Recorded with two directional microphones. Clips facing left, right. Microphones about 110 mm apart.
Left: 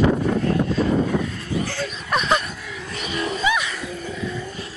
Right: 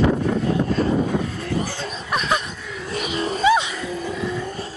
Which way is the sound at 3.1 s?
30° right (ahead or behind).